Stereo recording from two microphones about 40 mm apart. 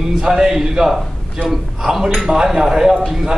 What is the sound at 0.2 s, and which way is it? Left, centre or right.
A man's voice, centre.